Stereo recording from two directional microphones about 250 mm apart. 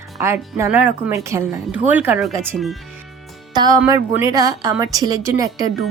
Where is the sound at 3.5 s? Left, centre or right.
Centre.